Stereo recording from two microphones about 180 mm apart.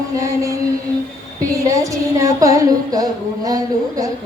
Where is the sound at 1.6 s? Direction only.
20° right (ahead or behind).